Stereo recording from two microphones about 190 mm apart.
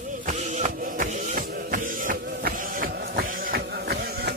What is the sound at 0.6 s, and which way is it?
Music, 45° right (ahead or behind).